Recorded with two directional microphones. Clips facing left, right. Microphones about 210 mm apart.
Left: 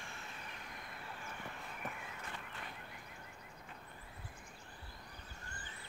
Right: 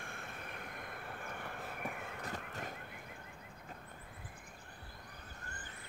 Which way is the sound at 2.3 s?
45° right (ahead or behind).